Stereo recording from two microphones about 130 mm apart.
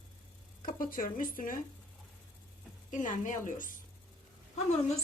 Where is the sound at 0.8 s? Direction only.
90° left.